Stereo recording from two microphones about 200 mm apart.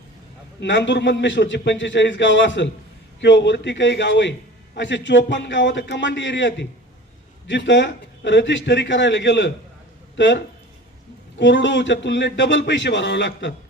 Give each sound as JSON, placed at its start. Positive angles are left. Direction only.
{"t": 0.6, "sound": "a man's voice", "side_deg": 60}